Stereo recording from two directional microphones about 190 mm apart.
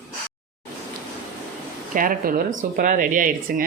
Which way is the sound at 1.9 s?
45° right (ahead or behind).